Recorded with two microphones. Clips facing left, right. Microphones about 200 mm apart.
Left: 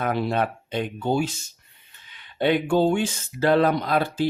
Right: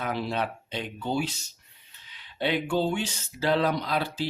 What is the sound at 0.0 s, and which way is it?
Mantra, 55° left (ahead or behind).